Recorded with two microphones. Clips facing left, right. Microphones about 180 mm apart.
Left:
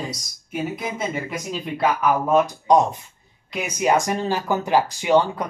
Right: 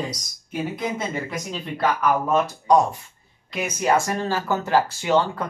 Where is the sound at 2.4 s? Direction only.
20° left (ahead or behind).